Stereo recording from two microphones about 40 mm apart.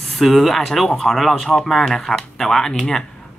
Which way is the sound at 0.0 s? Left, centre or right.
Centre.